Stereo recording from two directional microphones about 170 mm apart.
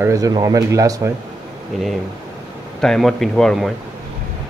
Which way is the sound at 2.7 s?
5° left (ahead or behind).